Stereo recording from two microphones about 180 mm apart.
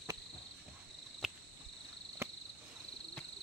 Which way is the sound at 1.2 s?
Centre (ahead or behind).